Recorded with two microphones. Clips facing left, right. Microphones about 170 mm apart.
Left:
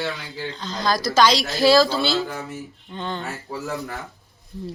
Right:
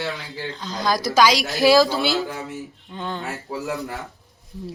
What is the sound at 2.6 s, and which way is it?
Speech, centre (ahead or behind).